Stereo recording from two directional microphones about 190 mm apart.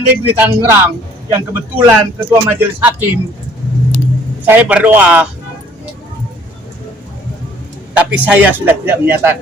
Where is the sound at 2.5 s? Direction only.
10° right (ahead or behind).